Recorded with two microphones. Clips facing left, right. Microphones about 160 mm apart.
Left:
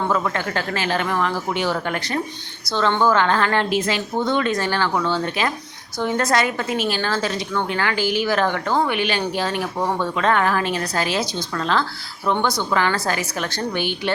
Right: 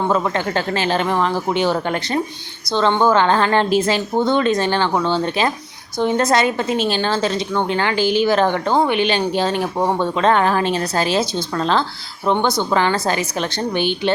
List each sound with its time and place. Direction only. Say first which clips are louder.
0.1 s a woman's voice: right 3 dB; 25° right (ahead or behind)